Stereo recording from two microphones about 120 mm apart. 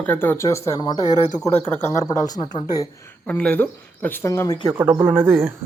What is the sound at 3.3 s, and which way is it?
Speech, 10° left (ahead or behind).